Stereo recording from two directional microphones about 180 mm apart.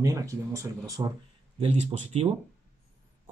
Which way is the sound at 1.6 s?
35° right (ahead or behind).